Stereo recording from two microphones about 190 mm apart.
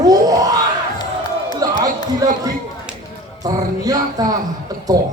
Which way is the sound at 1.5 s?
20° right (ahead or behind).